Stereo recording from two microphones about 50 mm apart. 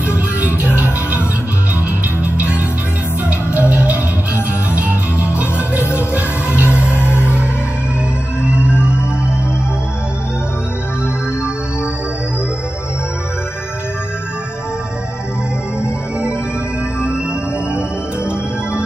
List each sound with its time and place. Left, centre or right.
0.0 s music: right
3.3 s music: right
6.9 s music: left
8.4 s music: right